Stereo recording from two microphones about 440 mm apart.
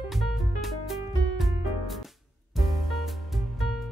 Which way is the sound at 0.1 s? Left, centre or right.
Centre.